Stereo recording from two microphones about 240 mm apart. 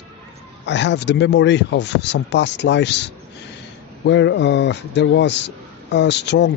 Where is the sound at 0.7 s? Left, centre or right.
Left.